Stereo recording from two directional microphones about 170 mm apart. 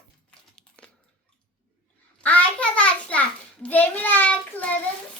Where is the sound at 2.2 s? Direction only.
10° left (ahead or behind).